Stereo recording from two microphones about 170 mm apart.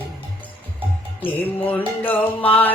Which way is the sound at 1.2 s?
10° left (ahead or behind).